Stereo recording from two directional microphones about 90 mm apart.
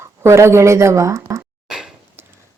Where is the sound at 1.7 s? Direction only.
10° right (ahead or behind).